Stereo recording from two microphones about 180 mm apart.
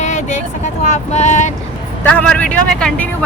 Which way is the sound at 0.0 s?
40° left (ahead or behind).